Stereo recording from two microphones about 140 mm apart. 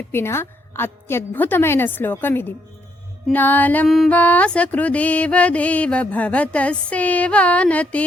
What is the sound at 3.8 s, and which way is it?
Music, centre (ahead or behind).